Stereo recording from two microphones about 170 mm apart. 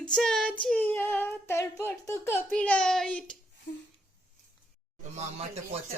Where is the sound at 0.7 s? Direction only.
10° left (ahead or behind).